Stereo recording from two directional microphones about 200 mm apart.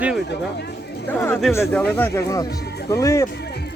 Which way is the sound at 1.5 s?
10° left (ahead or behind).